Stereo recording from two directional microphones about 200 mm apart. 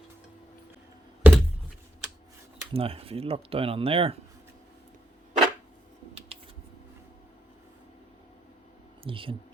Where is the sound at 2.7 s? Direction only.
30° right (ahead or behind).